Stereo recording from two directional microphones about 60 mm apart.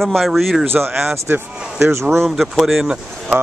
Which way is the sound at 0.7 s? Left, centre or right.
Right.